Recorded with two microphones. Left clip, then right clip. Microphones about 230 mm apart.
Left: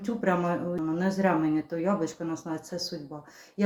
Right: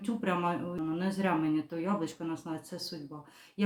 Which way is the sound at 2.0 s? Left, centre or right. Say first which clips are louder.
Left 4 dB; right.